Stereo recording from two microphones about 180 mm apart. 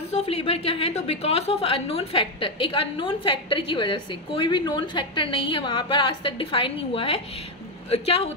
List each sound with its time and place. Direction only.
0.1 s a woman's voice: 35° left (ahead or behind)